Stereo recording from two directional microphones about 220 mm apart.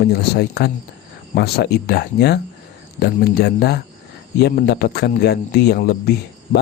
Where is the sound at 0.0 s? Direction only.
45° left (ahead or behind).